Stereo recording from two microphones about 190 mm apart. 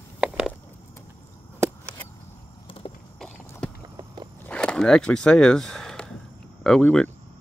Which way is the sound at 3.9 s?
25° right (ahead or behind).